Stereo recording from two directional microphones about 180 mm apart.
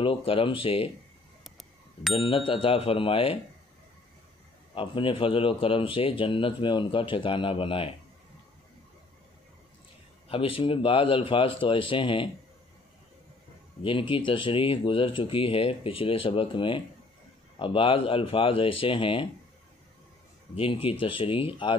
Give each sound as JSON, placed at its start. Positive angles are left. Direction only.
{"t": 0.0, "sound": "a man's voice", "side_deg": 30}
{"t": 1.4, "sound": "a sound", "side_deg": 0}
{"t": 2.1, "sound": "speech", "side_deg": 30}
{"t": 4.7, "sound": "a man's voice", "side_deg": 30}
{"t": 10.3, "sound": "a man's voice", "side_deg": 30}
{"t": 13.8, "sound": "a man's voice", "side_deg": 30}
{"t": 20.5, "sound": "a man's voice", "side_deg": 30}